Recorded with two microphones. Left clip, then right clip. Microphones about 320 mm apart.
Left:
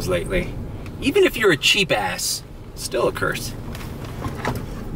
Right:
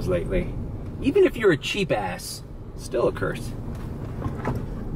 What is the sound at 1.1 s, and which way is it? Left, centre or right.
Speech, centre.